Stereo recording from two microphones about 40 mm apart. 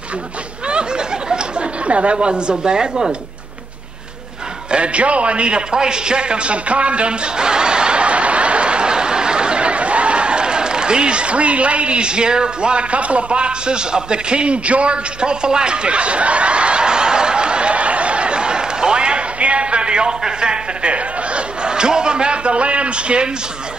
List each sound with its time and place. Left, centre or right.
0.7 s a sound: right
2.6 s speech: right
4.6 s a man's voice: right